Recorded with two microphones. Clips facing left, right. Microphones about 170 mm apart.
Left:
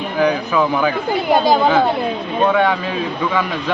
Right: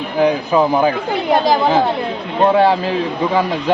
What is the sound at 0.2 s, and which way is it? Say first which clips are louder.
Speech: right 3 dB; 30° right (ahead or behind).